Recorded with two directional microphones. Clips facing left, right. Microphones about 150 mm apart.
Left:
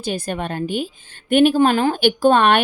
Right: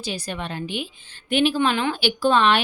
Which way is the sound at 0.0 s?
50° left (ahead or behind).